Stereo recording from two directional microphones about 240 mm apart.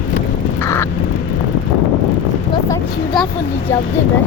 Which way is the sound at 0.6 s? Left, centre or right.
Centre.